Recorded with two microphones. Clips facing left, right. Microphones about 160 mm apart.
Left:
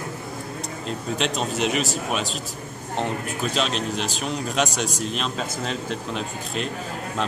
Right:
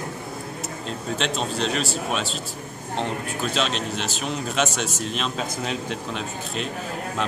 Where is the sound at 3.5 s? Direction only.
Centre (ahead or behind).